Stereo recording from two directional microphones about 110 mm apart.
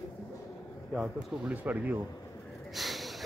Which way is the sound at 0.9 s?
5° right (ahead or behind).